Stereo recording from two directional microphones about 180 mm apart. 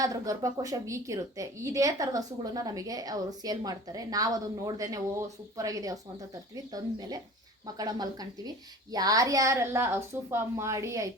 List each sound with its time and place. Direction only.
0.0 s a woman's voice: 20° right (ahead or behind)